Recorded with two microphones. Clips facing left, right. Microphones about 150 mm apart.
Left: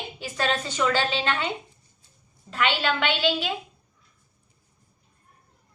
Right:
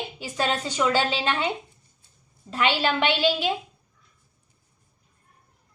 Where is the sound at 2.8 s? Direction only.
20° right (ahead or behind).